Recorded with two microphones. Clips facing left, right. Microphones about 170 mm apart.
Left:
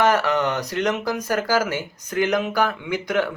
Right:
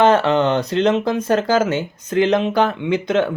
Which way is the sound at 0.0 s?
25° right (ahead or behind).